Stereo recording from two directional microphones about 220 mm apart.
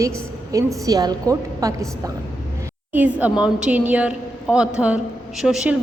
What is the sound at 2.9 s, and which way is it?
A woman's voice, 5° right (ahead or behind).